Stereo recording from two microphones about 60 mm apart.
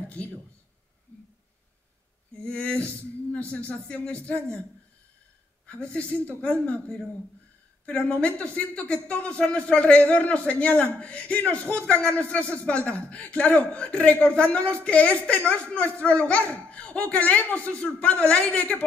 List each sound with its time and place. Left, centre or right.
1.1 s a sound: left
2.4 s speech: centre
5.7 s speech: left